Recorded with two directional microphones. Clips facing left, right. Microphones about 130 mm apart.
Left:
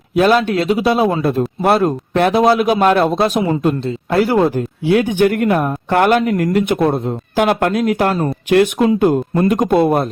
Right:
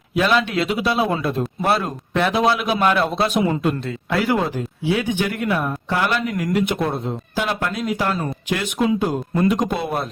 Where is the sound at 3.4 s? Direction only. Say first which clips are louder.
Left 4 dB; 30° left (ahead or behind).